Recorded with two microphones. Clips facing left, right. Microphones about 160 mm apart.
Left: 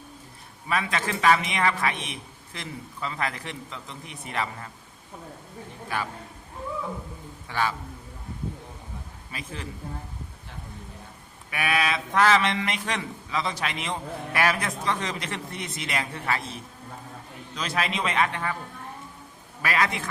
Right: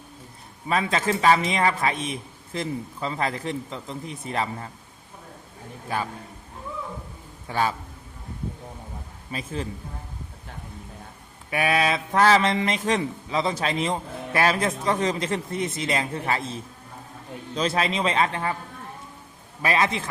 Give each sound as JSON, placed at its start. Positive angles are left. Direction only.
{"t": 0.7, "sound": "a man's voice", "side_deg": -30}
{"t": 7.4, "sound": "a man's voice", "side_deg": -30}
{"t": 9.3, "sound": "speech", "side_deg": -30}
{"t": 11.5, "sound": "speech", "side_deg": -30}
{"t": 17.5, "sound": "a man's voice", "side_deg": -30}
{"t": 19.6, "sound": "speech", "side_deg": -25}